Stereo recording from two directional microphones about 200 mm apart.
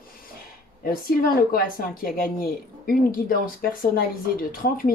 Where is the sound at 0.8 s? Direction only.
45° left (ahead or behind).